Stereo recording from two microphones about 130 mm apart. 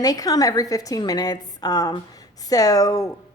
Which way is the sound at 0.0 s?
30° left (ahead or behind).